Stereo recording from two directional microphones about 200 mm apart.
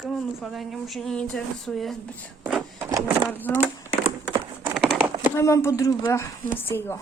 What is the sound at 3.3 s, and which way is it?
Speech, 10° left (ahead or behind).